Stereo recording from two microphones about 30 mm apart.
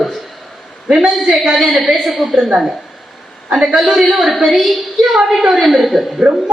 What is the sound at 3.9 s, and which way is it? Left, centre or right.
A woman's voice, centre.